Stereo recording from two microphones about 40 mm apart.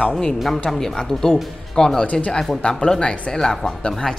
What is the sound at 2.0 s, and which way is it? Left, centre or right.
Speech, left.